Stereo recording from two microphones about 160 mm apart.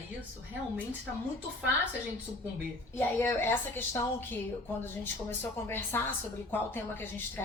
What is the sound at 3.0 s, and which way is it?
Speech, 15° left (ahead or behind).